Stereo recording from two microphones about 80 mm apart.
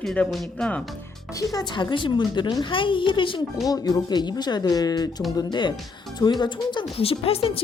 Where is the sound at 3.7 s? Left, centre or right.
Left.